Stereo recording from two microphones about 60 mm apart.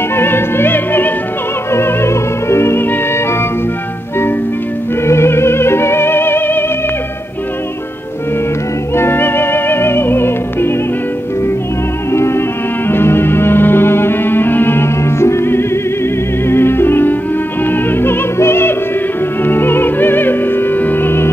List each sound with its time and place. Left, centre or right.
0.1 s music: left
5.0 s music: left
8.9 s music: left
12.1 s music: left
19.4 s opera: left